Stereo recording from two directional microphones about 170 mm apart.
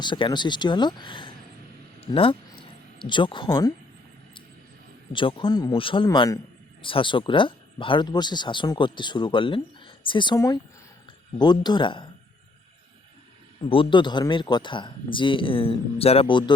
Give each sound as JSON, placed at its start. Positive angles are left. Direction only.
{"t": 0.0, "sound": "speech", "side_deg": 25}
{"t": 2.0, "sound": "a sound", "side_deg": 30}
{"t": 5.1, "sound": "speech", "side_deg": 30}
{"t": 13.7, "sound": "speech", "side_deg": 30}